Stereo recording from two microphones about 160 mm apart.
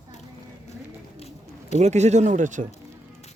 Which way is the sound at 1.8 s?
45° right (ahead or behind).